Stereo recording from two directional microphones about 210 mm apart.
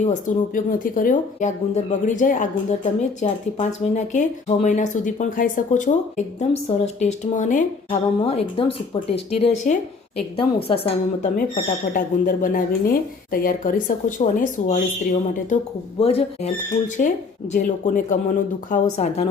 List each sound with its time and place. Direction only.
0.0 s a woman's voice: 40° left (ahead or behind)
11.3 s a woman's voice: 40° left (ahead or behind)
17.0 s speech: 40° left (ahead or behind)